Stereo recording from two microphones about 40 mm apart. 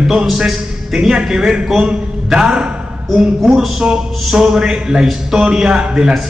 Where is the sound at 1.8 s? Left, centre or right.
Right.